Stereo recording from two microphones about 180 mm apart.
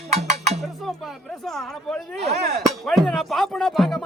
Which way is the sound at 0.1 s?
40° right (ahead or behind).